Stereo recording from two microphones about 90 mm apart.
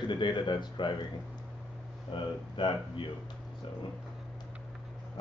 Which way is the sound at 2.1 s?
65° left (ahead or behind).